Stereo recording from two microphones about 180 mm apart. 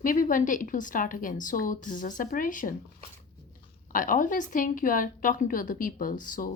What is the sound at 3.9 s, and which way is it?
A woman's voice, 50° left (ahead or behind).